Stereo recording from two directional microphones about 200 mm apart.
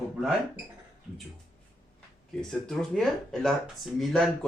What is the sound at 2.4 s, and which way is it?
Speech, centre (ahead or behind).